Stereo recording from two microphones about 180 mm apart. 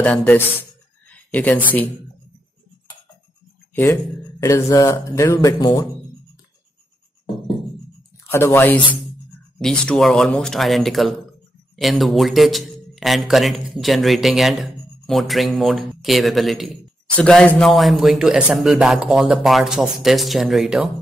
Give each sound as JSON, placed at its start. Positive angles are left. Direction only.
{"t": 0.0, "sound": "speech", "side_deg": 10}
{"t": 1.0, "sound": "a sound", "side_deg": 10}
{"t": 3.7, "sound": "speech", "side_deg": 15}
{"t": 8.3, "sound": "a man's voice", "side_deg": 15}